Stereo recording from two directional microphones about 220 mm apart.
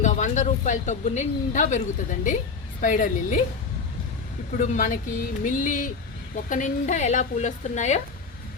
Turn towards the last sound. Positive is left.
turn(degrees=35)  # may be behind; listen again after turning